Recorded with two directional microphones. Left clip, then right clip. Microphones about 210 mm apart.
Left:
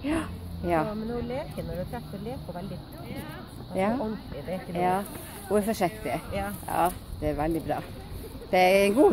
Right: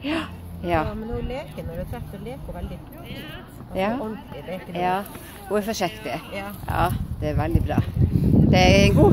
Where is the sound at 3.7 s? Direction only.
Centre (ahead or behind).